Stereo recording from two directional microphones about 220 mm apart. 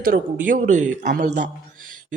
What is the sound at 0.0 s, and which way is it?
Speech, 40° right (ahead or behind).